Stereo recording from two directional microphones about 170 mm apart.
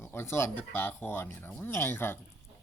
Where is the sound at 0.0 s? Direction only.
15° left (ahead or behind).